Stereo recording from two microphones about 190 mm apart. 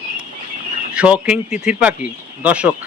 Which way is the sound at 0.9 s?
5° right (ahead or behind).